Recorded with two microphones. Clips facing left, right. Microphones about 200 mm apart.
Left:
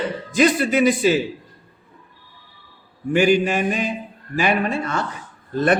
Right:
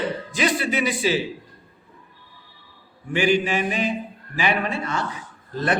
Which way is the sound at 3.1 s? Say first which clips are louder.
Left 4 dB; 45° left (ahead or behind).